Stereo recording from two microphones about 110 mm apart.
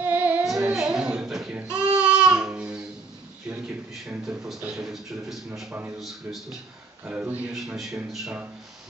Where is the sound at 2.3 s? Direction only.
10° right (ahead or behind).